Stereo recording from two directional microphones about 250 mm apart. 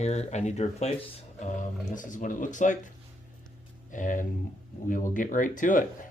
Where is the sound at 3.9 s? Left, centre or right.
Left.